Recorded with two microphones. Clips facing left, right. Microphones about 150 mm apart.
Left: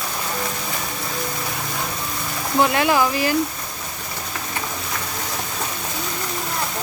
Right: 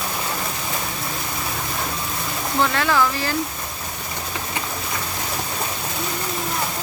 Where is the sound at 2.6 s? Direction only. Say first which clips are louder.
Left 2 dB; 20° left (ahead or behind).